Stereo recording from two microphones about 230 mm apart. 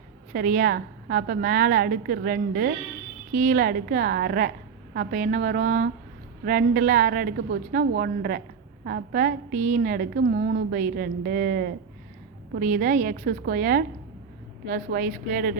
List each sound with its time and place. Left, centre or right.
0.3 s a woman's voice: right